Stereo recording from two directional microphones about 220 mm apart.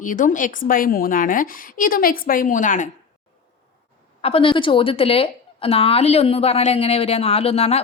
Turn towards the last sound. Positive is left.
turn(degrees=30)  # may be behind; listen again after turning